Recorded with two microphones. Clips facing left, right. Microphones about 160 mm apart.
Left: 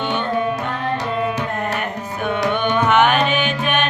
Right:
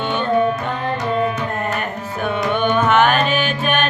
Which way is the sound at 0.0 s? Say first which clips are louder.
Right 1 dB; 15° left (ahead or behind).